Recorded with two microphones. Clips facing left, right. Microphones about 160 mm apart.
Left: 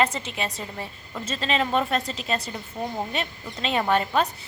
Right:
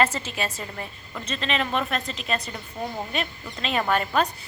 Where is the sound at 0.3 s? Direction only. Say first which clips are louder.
Even; 20° left (ahead or behind).